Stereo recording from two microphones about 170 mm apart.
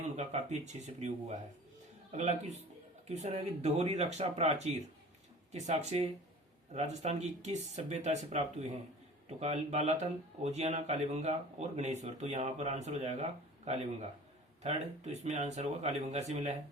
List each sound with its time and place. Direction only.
0.2 s speech: 40° right (ahead or behind)